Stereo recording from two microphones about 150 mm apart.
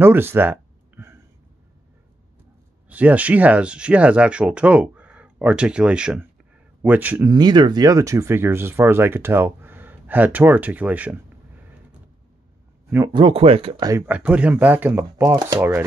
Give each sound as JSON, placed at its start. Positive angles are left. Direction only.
{"t": 0.0, "sound": "a sound", "side_deg": -15}
{"t": 2.9, "sound": "speech", "side_deg": -10}
{"t": 7.2, "sound": "speech", "side_deg": -30}
{"t": 13.1, "sound": "speech", "side_deg": -35}
{"t": 13.8, "sound": "speech", "side_deg": -15}